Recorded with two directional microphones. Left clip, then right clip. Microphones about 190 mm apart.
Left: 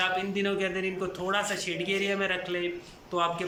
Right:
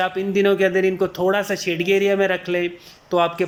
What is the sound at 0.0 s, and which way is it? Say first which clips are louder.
Speech: right 9 dB; 30° right (ahead or behind).